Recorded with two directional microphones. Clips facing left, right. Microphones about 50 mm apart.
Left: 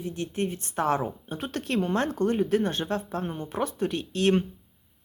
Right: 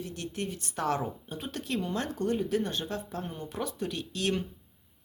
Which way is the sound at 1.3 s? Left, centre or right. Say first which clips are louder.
Left 7 dB; left.